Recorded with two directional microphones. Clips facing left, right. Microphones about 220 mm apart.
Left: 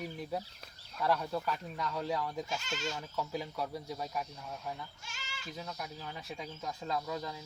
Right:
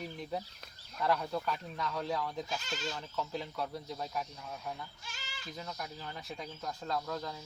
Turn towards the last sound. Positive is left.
turn(degrees=5)  # may be behind; listen again after turning